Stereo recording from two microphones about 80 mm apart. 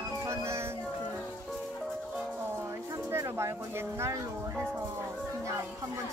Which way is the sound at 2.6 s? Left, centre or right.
Right.